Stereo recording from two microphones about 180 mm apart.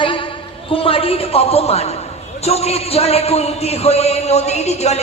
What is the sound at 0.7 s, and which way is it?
A man's voice, 30° left (ahead or behind).